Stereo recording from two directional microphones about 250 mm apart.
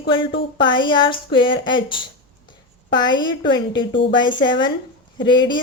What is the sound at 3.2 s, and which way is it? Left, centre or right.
A woman's voice, centre.